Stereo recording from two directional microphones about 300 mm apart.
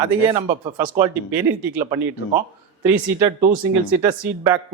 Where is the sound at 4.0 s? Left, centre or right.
Centre.